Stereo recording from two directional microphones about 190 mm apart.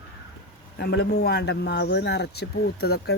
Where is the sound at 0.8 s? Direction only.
60° left (ahead or behind).